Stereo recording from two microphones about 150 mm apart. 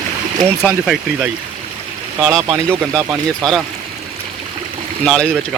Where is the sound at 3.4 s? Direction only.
5° left (ahead or behind).